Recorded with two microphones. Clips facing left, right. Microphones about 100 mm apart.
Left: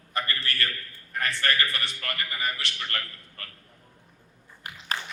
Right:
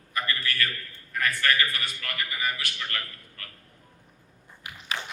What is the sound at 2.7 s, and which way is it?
Speech, 40° left (ahead or behind).